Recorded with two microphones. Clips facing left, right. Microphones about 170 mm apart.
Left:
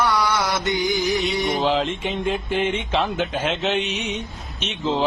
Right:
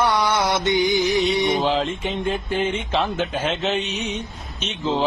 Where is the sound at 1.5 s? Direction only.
Centre (ahead or behind).